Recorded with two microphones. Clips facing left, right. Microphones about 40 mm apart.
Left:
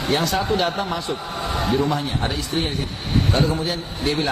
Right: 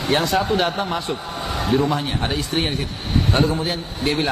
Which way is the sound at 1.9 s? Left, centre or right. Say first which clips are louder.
Right 1 dB; right.